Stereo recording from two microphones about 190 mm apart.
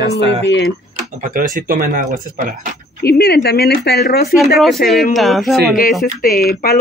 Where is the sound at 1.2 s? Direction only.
45° right (ahead or behind).